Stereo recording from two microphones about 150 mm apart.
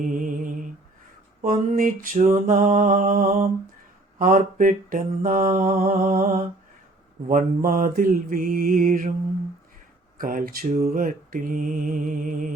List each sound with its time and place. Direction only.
0.0 s mantra: 65° right (ahead or behind)
10.2 s mantra: 70° right (ahead or behind)
10.8 s mantra: 65° right (ahead or behind)